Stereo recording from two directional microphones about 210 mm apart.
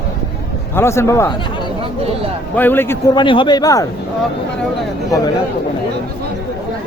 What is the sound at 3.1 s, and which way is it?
Speech, 25° left (ahead or behind).